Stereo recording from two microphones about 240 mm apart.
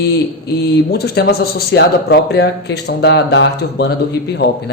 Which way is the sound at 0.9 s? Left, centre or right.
Left.